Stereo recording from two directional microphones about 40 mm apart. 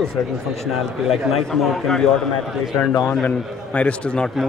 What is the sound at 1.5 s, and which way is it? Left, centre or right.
Speech, centre.